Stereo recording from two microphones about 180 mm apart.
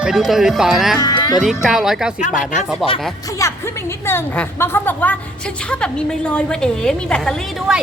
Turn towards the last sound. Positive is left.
turn(degrees=5)  # may be behind; listen again after turning